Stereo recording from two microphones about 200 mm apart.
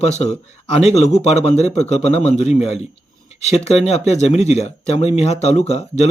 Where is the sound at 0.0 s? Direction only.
35° left (ahead or behind).